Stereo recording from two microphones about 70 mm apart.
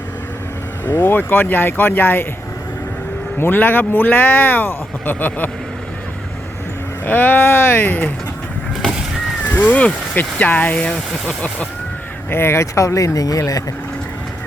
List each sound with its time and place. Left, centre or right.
0.9 s speech: left
3.3 s speech: left
7.0 s speech: left
9.5 s speech: left
12.3 s speech: left